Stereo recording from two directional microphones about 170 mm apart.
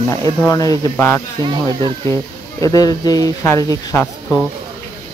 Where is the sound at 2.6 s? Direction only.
20° left (ahead or behind).